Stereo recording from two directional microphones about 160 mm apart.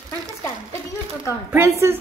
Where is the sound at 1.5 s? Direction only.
15° right (ahead or behind).